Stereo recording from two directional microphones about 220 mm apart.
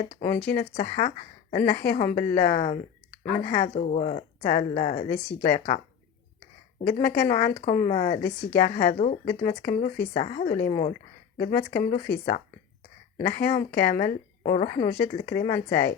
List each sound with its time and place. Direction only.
0.3 s speech: 5° left (ahead or behind)
0.6 s speech: 35° left (ahead or behind)
11.3 s speech: 40° left (ahead or behind)